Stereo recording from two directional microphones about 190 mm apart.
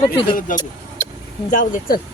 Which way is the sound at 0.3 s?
45° left (ahead or behind).